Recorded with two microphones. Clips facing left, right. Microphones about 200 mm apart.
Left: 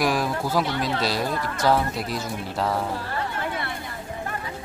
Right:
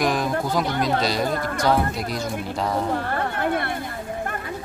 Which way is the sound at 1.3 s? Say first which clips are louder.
Right 3 dB; 50° right (ahead or behind).